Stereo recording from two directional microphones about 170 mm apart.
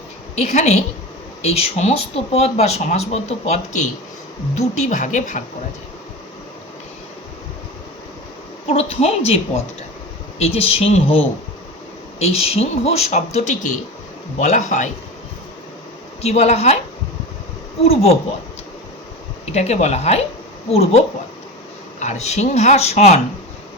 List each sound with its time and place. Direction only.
0.3 s a woman's voice: 40° left (ahead or behind)
8.6 s a woman's voice: 35° left (ahead or behind)
16.2 s speech: 40° left (ahead or behind)
17.8 s speech: 35° left (ahead or behind)
19.5 s speech: 40° left (ahead or behind)
22.0 s speech: 40° left (ahead or behind)